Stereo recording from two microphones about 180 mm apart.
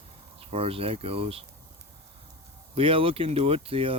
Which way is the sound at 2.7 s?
30° right (ahead or behind).